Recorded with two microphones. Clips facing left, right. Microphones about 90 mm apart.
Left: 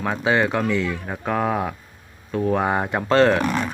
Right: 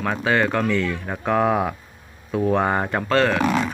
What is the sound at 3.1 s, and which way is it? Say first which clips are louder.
Speech: left 4 dB; 30° left (ahead or behind).